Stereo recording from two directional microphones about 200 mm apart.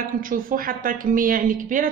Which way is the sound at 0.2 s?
45° right (ahead or behind).